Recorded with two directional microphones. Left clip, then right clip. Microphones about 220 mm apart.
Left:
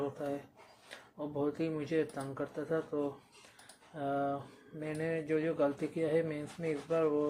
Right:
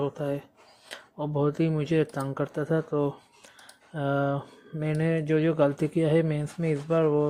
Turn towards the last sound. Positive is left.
turn(degrees=-50)  # may be behind; listen again after turning